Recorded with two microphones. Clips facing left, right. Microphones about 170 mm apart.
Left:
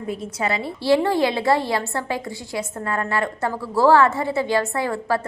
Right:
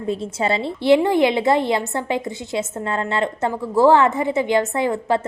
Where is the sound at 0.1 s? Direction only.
25° right (ahead or behind).